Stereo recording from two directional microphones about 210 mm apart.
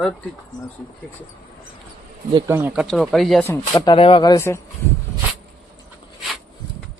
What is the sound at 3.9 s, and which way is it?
Speech, 25° left (ahead or behind).